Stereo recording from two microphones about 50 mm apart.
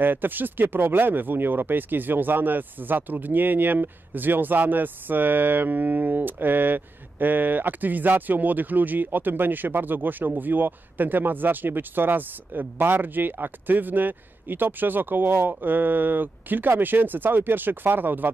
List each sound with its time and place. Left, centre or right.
0.0 s speech: right